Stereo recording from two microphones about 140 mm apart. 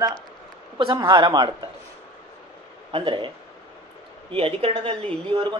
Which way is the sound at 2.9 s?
35° right (ahead or behind).